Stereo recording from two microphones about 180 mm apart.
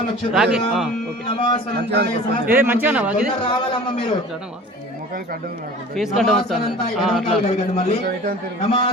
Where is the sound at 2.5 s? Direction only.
10° right (ahead or behind).